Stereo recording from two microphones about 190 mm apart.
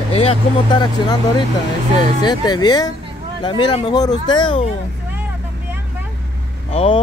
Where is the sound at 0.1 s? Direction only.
30° left (ahead or behind).